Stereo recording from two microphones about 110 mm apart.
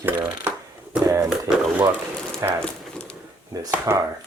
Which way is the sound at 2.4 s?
30° right (ahead or behind).